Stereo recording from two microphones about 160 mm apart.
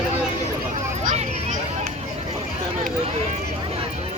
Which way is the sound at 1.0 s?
45° right (ahead or behind).